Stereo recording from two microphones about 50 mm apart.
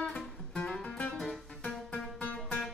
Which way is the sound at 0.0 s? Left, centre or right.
Centre.